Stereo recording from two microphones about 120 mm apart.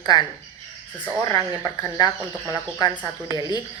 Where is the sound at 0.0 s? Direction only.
35° left (ahead or behind).